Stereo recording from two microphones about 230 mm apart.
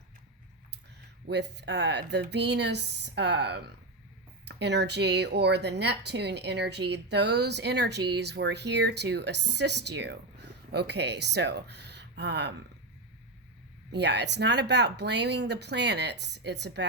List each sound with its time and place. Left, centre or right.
1.3 s a woman's voice: right
13.9 s a woman's voice: right